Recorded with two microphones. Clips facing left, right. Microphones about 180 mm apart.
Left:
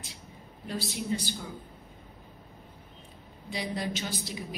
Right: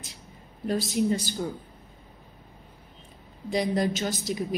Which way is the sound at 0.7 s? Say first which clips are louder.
Right 8 dB; 45° right (ahead or behind).